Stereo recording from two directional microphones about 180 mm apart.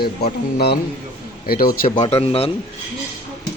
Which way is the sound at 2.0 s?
35° left (ahead or behind).